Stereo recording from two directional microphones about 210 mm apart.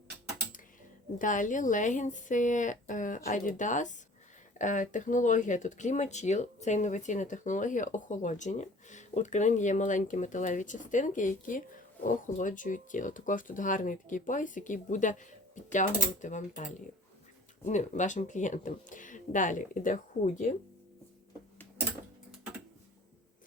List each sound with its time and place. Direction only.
1.2 s speech: 40° left (ahead or behind)